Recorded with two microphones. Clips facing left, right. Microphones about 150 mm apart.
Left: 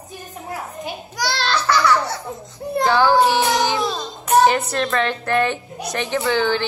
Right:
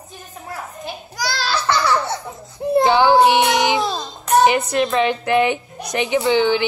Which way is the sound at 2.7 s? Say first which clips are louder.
Right 2 dB; 20° right (ahead or behind).